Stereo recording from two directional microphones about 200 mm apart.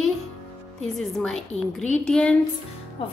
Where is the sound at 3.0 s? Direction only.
25° left (ahead or behind).